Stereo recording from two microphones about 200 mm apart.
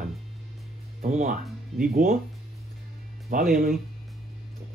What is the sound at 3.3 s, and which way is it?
Speech, 45° right (ahead or behind).